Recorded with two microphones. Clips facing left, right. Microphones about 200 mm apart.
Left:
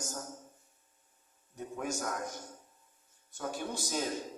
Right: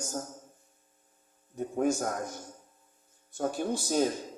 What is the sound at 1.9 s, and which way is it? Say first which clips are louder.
Speech: right 6 dB; 40° right (ahead or behind).